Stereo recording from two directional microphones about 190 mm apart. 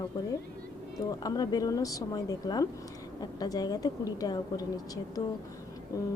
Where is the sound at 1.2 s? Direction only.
20° left (ahead or behind).